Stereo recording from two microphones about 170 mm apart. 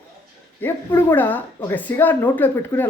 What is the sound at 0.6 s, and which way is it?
Speech, 15° left (ahead or behind).